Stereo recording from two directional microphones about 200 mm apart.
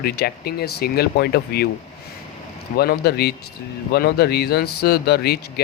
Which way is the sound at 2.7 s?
50° left (ahead or behind).